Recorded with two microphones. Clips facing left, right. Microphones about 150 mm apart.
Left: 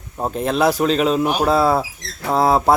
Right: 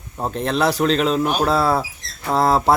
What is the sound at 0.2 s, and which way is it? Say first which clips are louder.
Speech: left 2 dB; 5° left (ahead or behind).